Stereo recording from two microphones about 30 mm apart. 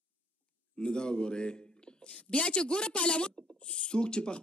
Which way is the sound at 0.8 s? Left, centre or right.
Left.